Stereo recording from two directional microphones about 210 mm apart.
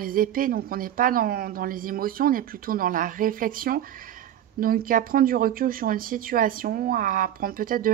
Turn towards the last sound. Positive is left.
turn(degrees=-40)  # may be behind; listen again after turning